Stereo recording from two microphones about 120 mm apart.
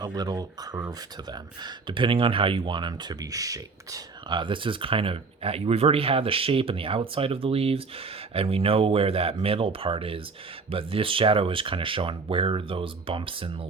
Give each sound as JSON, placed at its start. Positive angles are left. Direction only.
{"t": 0.0, "sound": "speech", "side_deg": -35}